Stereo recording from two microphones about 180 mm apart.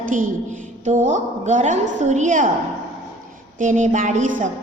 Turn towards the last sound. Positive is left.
turn(degrees=-45)  # may be behind; listen again after turning